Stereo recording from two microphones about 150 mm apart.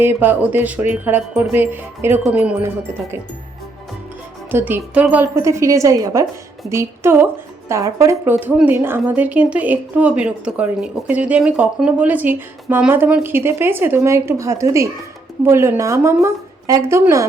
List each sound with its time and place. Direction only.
0.0 s speech: 15° right (ahead or behind)
4.5 s a woman's voice: 15° right (ahead or behind)